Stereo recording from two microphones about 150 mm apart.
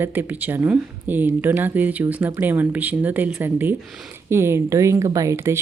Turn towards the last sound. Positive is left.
turn(degrees=-20)  # may be behind; listen again after turning